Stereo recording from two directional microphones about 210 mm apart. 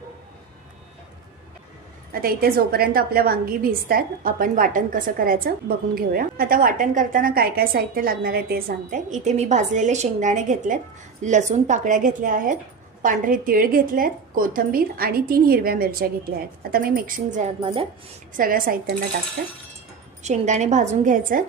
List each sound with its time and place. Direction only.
2.2 s a woman's voice: 45° right (ahead or behind); by 17.8 s 25° right (ahead or behind)
18.3 s a woman's voice: 40° right (ahead or behind)